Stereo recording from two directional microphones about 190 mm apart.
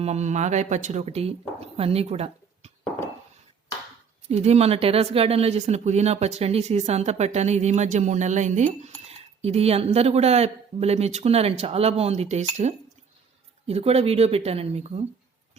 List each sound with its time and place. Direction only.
0.0 s speech: 35° right (ahead or behind)
4.3 s speech: 35° right (ahead or behind)
13.7 s speech: 30° right (ahead or behind)